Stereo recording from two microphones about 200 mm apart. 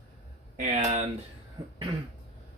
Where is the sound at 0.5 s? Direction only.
40° right (ahead or behind).